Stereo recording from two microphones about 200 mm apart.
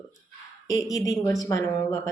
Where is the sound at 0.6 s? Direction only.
15° left (ahead or behind).